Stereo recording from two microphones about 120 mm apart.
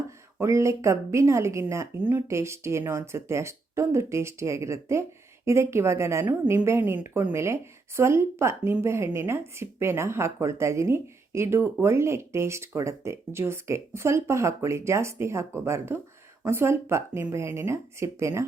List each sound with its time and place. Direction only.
0.3 s a woman's voice: 25° right (ahead or behind)